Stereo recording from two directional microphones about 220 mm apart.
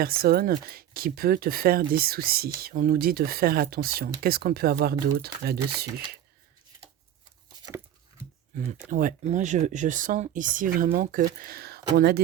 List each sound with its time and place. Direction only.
0.0 s speech: 45° right (ahead or behind)
7.4 s a sound: 20° right (ahead or behind)
8.5 s speech: 35° right (ahead or behind)